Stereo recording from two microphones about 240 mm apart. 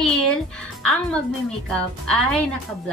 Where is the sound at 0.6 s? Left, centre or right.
Centre.